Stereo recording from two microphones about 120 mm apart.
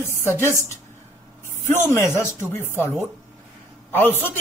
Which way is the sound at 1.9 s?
25° left (ahead or behind).